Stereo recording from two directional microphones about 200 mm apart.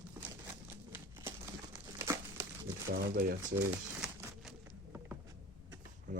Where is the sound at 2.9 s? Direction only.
50° right (ahead or behind).